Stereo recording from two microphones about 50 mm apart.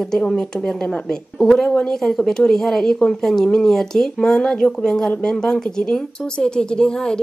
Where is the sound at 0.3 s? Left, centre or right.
Centre.